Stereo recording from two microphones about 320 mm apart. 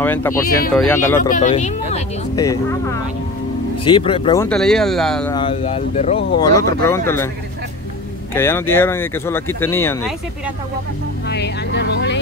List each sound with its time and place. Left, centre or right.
0.0 s speech: centre
1.3 s speech: left
2.4 s speech: centre
5.3 s speech: centre
8.4 s speech: centre
11.2 s speech: left